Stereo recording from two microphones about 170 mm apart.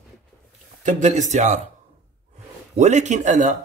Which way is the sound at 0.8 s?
45° right (ahead or behind).